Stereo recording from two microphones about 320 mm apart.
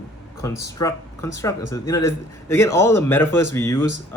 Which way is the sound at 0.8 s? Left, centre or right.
Centre.